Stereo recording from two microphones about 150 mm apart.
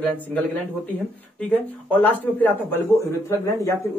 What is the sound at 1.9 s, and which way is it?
A man's voice, 10° left (ahead or behind).